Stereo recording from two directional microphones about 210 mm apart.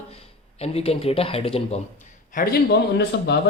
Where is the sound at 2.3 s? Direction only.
40° left (ahead or behind).